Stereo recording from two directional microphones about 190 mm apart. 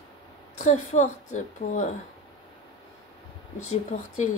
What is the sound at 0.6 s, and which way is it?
A woman's voice, 40° left (ahead or behind).